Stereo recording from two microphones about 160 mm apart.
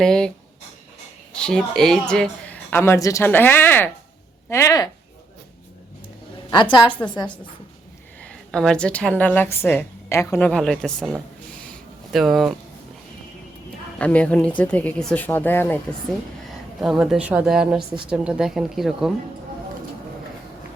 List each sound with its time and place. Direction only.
0.0 s speech: 5° left (ahead or behind)
1.3 s a woman's voice: 5° left (ahead or behind); by 4.9 s 20° left (ahead or behind)
6.5 s a woman's voice: 30° left (ahead or behind)
8.2 s a woman's voice: 5° left (ahead or behind)
10.5 s speech: 5° left (ahead or behind)
11.7 s a sound: centre (ahead or behind)
14.0 s a woman's voice: 10° left (ahead or behind)
16.5 s a woman's voice: centre (ahead or behind)